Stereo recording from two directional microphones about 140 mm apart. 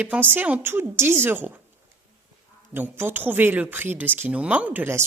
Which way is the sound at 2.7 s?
15° right (ahead or behind).